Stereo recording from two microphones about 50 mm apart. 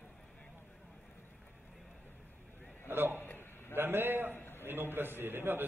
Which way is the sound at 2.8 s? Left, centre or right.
Right.